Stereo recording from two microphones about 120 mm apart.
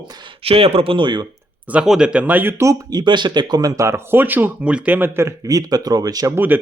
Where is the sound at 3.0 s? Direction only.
40° right (ahead or behind).